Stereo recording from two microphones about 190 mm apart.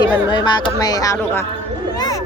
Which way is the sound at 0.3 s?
20° left (ahead or behind).